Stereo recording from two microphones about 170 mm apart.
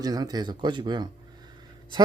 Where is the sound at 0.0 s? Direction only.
20° right (ahead or behind).